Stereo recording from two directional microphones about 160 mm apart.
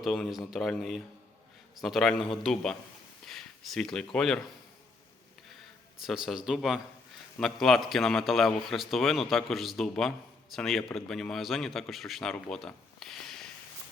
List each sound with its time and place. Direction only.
0.0 s a man's voice: centre (ahead or behind)
6.1 s a man's voice: 5° right (ahead or behind)